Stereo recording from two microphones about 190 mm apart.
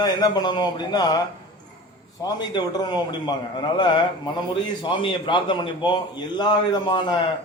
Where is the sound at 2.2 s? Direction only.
20° left (ahead or behind).